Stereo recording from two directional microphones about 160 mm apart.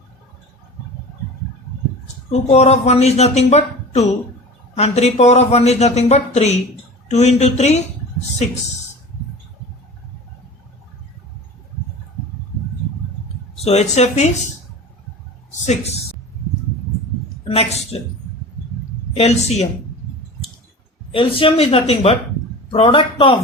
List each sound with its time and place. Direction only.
2.5 s speech: 40° left (ahead or behind)
13.7 s speech: 45° left (ahead or behind)
15.6 s speech: 45° left (ahead or behind)
17.5 s a woman's voice: 40° left (ahead or behind)
19.1 s a woman's voice: 40° left (ahead or behind)
21.1 s a woman's voice: 35° left (ahead or behind)